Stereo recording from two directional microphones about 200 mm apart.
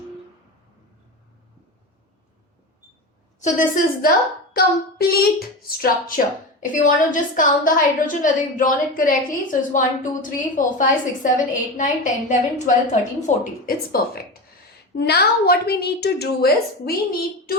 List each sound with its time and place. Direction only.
3.4 s a woman's voice: 40° left (ahead or behind)